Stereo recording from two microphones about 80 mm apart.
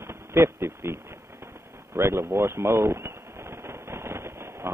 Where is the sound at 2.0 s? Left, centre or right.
Right.